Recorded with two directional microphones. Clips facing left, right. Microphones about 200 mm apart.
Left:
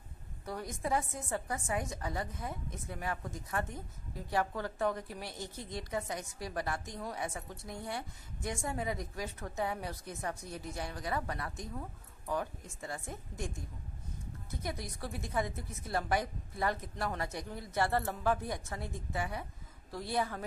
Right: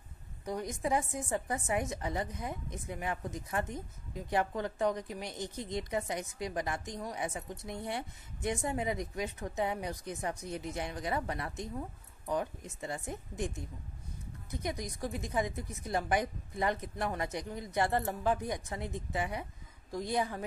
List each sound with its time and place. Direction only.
0.5 s a woman's voice: 15° right (ahead or behind)
14.5 s a woman's voice: 15° right (ahead or behind)